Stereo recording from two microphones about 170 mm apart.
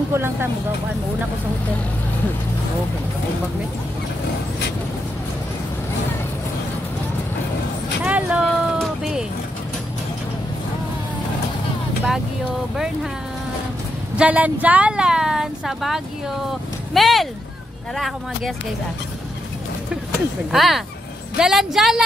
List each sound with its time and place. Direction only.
0.1 s speech: 15° right (ahead or behind)
8.0 s vehicle: 5° right (ahead or behind)
14.1 s a woman's voice: 10° right (ahead or behind)
16.9 s a sound: centre (ahead or behind)
17.9 s a woman's voice: centre (ahead or behind)
20.1 s a woman's voice: centre (ahead or behind)